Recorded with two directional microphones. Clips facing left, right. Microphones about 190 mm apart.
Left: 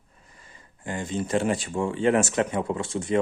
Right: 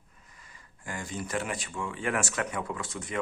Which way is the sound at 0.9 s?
25° left (ahead or behind).